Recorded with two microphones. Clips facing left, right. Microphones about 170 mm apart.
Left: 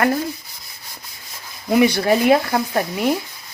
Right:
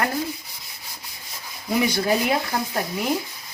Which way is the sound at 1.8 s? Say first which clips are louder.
Left 6 dB; 70° left (ahead or behind).